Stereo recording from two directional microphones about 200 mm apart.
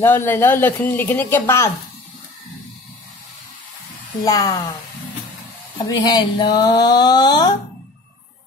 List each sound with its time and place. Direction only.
0.0 s speech: 10° left (ahead or behind)
4.2 s speech: 20° left (ahead or behind)
5.9 s speech: 20° left (ahead or behind)